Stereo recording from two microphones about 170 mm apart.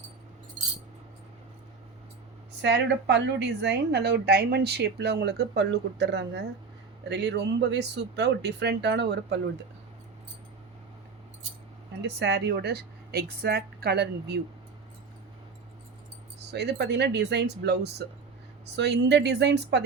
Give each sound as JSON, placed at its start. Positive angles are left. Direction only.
{"t": 2.6, "sound": "a woman's voice", "side_deg": -90}
{"t": 12.0, "sound": "speech", "side_deg": -85}
{"t": 16.5, "sound": "a woman's voice", "side_deg": -80}
{"t": 18.8, "sound": "a woman's voice", "side_deg": -90}